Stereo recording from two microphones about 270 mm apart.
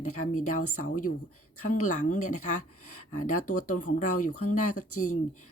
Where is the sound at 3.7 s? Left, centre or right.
Left.